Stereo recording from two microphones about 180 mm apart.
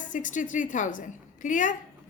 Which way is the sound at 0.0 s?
45° left (ahead or behind).